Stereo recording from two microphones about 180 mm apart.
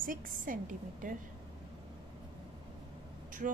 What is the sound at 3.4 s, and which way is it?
Speech, 45° right (ahead or behind).